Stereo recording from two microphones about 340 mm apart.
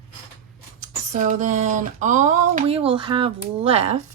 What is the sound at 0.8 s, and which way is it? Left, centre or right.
Speech, right.